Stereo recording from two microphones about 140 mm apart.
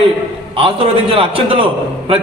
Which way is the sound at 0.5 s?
40° right (ahead or behind).